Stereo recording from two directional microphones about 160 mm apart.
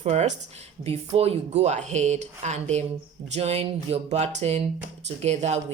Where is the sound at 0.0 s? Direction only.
45° right (ahead or behind).